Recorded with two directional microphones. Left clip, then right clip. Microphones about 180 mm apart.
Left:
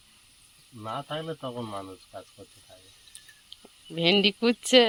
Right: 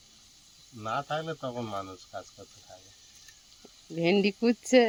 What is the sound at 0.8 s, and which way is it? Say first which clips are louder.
Speech: right 2 dB; 15° right (ahead or behind).